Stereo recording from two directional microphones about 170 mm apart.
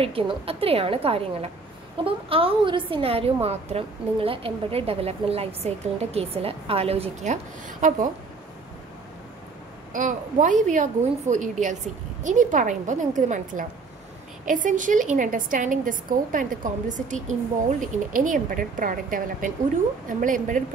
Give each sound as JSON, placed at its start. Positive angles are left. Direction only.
{"t": 0.0, "sound": "a woman's voice", "side_deg": -35}
{"t": 7.6, "sound": "a woman's voice", "side_deg": -50}
{"t": 9.9, "sound": "a woman's voice", "side_deg": -50}